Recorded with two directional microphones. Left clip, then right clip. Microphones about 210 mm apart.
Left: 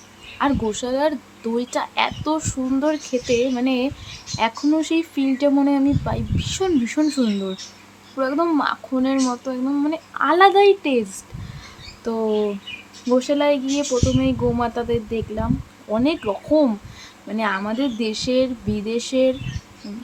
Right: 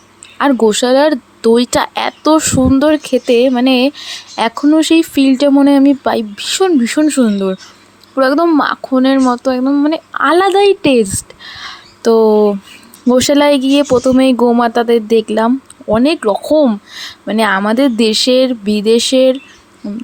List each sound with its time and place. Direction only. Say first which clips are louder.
0.3 s speech: right 11 dB; 45° right (ahead or behind)